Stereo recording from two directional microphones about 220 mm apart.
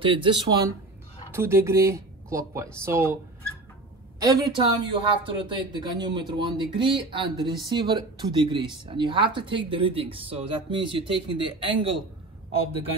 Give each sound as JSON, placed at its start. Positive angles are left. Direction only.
{"t": 0.0, "sound": "speech", "side_deg": -25}
{"t": 4.2, "sound": "speech", "side_deg": -20}